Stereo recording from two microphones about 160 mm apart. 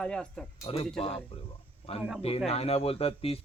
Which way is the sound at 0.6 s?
40° left (ahead or behind).